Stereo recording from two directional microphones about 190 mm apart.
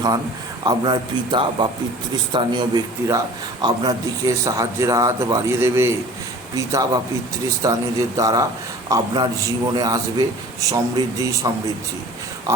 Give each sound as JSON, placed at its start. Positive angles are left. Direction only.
{"t": 0.6, "sound": "a man's voice", "side_deg": -25}